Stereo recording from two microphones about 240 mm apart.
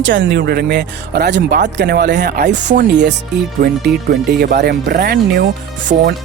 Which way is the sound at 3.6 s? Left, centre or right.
Right.